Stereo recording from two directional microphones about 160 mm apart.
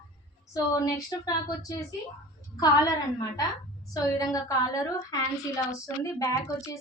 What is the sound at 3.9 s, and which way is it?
A woman's voice, 20° left (ahead or behind).